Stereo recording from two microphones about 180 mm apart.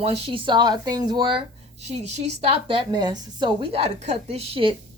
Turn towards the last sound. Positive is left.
turn(degrees=-30)  # may be behind; listen again after turning